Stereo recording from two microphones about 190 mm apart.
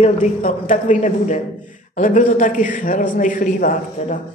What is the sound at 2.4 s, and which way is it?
A man's voice, 40° left (ahead or behind).